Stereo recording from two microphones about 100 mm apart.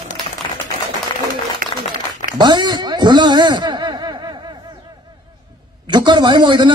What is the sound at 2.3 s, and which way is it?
A man's voice, 50° right (ahead or behind).